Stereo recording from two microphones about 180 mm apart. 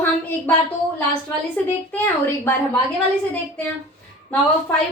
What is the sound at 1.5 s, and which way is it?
A woman's voice, 10° left (ahead or behind).